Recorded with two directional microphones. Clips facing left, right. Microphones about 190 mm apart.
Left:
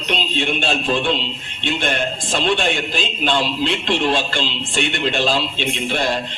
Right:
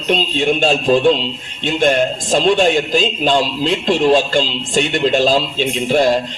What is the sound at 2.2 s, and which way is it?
A man's voice, 40° right (ahead or behind).